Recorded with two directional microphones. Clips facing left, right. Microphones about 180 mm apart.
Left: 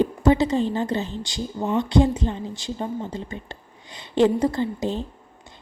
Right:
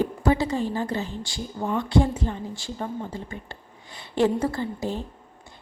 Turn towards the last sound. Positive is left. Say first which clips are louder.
# left 4 dB
turn(degrees=20)  # may be behind; listen again after turning